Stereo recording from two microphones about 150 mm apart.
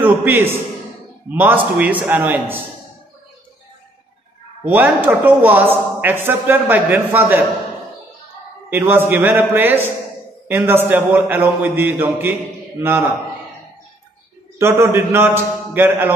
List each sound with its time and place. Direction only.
0.0 s a sound: 15° right (ahead or behind)
1.3 s speech: 10° right (ahead or behind)
4.6 s speech: 10° right (ahead or behind)
8.6 s speech: 15° right (ahead or behind)
14.6 s speech: 15° right (ahead or behind)